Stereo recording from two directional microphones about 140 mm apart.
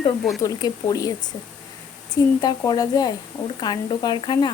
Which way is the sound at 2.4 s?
30° left (ahead or behind).